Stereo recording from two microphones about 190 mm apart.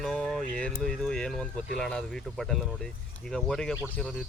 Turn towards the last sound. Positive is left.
turn(degrees=5)  # may be behind; listen again after turning